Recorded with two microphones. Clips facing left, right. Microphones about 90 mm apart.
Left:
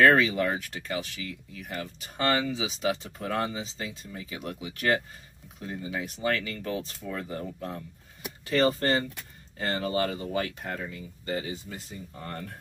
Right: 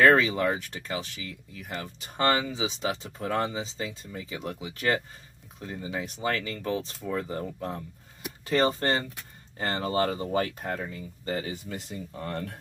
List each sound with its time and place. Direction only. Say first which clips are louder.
0.0 s speech: even; 30° right (ahead or behind)
11.7 s speech: right 4 dB; 80° right